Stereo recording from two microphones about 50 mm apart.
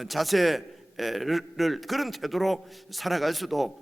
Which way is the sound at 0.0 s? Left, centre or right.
Centre.